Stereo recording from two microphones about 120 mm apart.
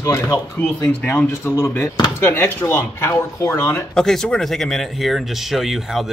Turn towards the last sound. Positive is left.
turn(degrees=0)  # may be behind; listen again after turning